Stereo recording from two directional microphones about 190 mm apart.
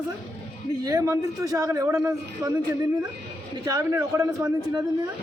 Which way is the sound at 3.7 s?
20° right (ahead or behind).